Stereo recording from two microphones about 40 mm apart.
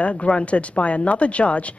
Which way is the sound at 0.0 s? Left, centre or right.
Left.